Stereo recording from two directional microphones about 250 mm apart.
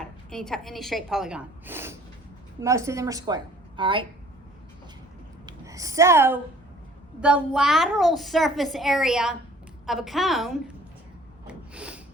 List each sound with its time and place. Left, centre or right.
0.0 s a woman's voice: centre
5.5 s a woman's voice: centre
11.4 s a sound: centre